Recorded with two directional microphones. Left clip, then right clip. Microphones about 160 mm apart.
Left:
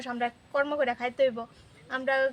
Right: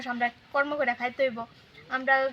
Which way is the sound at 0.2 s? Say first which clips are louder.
Right 1 dB; 35° left (ahead or behind).